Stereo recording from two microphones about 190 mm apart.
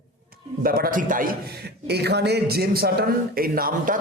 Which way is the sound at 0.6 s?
50° right (ahead or behind).